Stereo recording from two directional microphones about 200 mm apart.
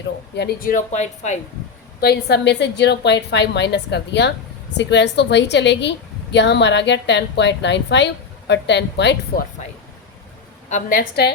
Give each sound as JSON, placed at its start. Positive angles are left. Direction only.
{"t": 0.3, "sound": "speech", "side_deg": 50}
{"t": 2.0, "sound": "a woman's voice", "side_deg": 55}
{"t": 10.7, "sound": "a woman's voice", "side_deg": 40}